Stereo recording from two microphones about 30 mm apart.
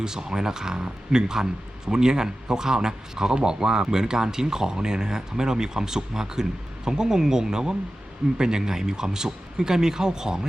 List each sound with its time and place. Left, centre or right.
0.0 s speech: centre